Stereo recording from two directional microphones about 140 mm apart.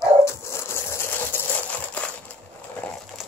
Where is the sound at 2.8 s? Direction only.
10° left (ahead or behind).